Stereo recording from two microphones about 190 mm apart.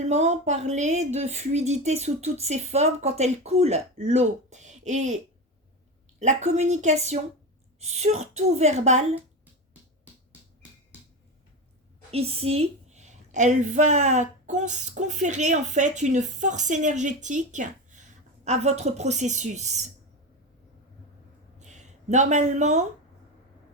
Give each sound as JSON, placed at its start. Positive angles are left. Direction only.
{"t": 0.0, "sound": "a woman's voice", "side_deg": -35}
{"t": 12.1, "sound": "a woman's voice", "side_deg": -30}
{"t": 21.6, "sound": "speech", "side_deg": -40}